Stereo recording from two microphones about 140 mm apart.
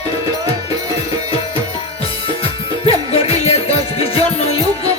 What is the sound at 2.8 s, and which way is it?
Music, 45° left (ahead or behind).